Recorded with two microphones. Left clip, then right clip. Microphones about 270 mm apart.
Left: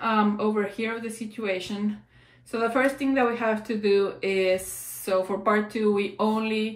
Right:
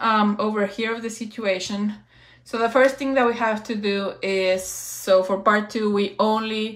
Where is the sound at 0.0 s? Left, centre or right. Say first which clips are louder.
Right 4 dB; right.